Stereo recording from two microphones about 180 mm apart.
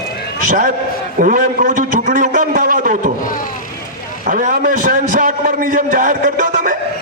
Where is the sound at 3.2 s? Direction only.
50° left (ahead or behind).